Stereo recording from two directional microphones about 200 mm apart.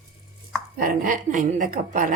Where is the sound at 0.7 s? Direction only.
45° right (ahead or behind).